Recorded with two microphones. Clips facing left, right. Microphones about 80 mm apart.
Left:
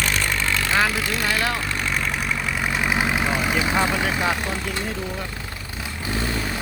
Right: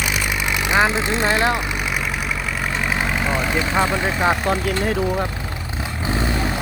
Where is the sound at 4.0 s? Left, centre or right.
Right.